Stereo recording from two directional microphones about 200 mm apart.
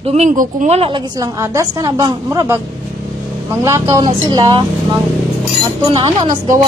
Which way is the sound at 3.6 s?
15° right (ahead or behind).